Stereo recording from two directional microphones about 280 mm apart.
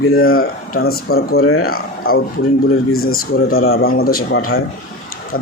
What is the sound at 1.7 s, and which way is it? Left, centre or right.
A man's voice, left.